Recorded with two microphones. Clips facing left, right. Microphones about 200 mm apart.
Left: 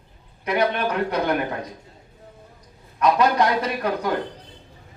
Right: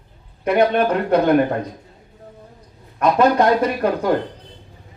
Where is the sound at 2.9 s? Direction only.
50° right (ahead or behind).